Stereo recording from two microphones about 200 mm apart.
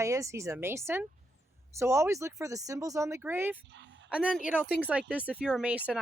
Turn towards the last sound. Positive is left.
turn(degrees=-5)  # may be behind; listen again after turning